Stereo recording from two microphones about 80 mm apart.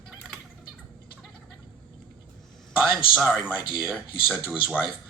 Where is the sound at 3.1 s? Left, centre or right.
Centre.